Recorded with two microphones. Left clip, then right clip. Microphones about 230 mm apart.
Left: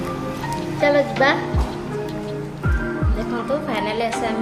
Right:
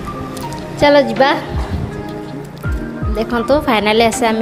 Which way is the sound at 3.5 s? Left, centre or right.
Right.